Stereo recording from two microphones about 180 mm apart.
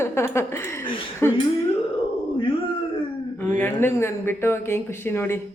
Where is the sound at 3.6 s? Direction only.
10° left (ahead or behind).